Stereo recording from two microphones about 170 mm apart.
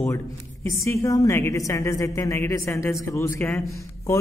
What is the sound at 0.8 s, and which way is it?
A man's voice, 20° left (ahead or behind).